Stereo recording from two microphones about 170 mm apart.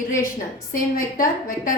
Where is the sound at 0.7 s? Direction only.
55° left (ahead or behind).